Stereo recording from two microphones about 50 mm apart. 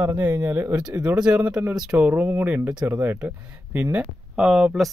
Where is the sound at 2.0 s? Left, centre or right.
Right.